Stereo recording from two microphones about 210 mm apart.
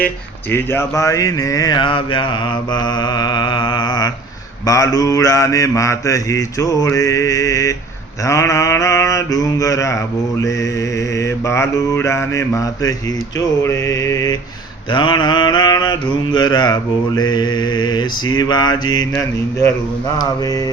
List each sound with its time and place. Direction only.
0.5 s mantra: 10° left (ahead or behind)